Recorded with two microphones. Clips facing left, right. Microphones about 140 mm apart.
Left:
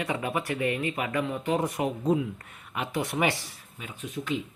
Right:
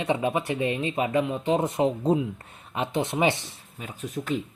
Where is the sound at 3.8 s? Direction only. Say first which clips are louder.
Right 3 dB; 40° right (ahead or behind).